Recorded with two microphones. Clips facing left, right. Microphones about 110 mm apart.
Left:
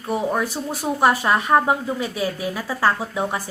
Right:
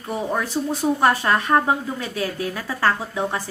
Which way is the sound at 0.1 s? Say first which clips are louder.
Left 2 dB; 10° left (ahead or behind).